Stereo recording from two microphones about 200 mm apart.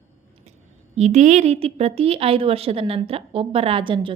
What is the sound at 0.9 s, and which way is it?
A woman's voice, 35° right (ahead or behind).